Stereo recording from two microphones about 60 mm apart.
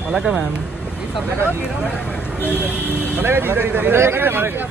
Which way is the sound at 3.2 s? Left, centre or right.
Right.